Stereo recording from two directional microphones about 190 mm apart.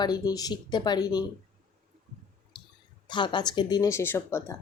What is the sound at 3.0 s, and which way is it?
Speech, 25° left (ahead or behind).